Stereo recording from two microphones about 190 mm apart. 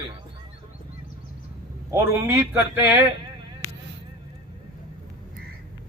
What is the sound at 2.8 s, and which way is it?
Speech, 10° right (ahead or behind).